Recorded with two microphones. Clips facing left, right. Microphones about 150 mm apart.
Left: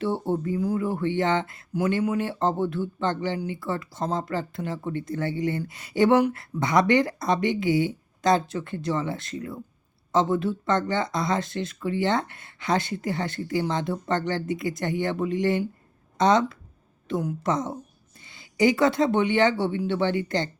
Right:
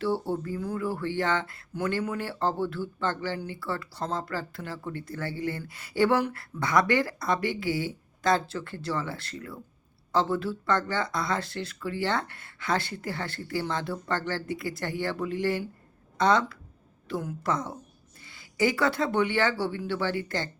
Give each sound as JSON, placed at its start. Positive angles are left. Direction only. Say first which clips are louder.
{"t": 0.0, "sound": "speech", "louder": "left 2 dB", "side_deg": 20}